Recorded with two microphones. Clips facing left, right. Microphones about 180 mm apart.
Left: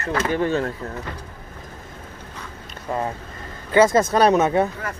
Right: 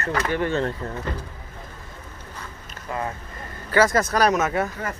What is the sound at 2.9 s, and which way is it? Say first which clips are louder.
Speech: left 4 dB; 35° left (ahead or behind).